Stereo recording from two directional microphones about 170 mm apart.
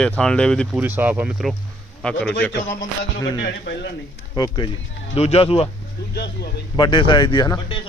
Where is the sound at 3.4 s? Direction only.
90° left.